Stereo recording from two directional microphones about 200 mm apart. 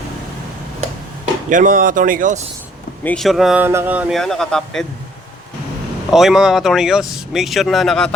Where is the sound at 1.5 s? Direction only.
40° right (ahead or behind).